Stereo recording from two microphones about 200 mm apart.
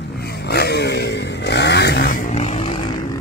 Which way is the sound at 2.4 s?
30° left (ahead or behind).